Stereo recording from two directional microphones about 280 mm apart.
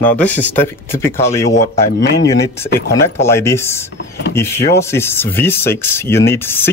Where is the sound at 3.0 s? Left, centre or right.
Centre.